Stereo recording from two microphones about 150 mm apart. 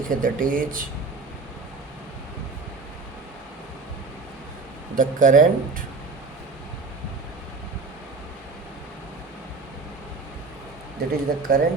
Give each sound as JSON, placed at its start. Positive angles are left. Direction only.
{"t": 0.1, "sound": "speech", "side_deg": -65}
{"t": 4.9, "sound": "speech", "side_deg": -60}
{"t": 11.1, "sound": "speech", "side_deg": -75}